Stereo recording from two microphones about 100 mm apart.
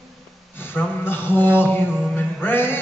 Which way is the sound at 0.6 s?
20° left (ahead or behind).